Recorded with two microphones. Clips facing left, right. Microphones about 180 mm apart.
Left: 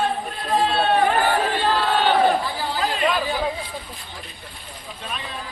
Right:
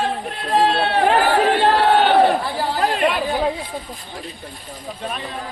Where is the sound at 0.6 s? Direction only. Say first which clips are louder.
Right 1 dB; 80° right.